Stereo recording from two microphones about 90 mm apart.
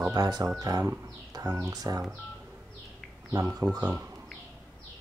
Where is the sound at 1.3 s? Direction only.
45° right (ahead or behind).